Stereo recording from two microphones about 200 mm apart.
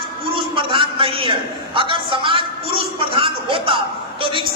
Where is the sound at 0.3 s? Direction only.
25° right (ahead or behind).